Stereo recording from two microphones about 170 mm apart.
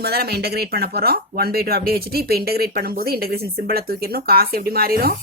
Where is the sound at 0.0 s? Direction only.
65° right (ahead or behind).